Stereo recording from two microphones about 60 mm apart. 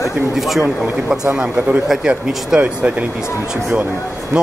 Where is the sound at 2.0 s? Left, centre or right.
Centre.